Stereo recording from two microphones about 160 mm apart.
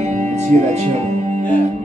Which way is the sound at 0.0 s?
45° right (ahead or behind).